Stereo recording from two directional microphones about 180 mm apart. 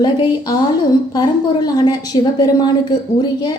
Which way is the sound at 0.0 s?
25° left (ahead or behind).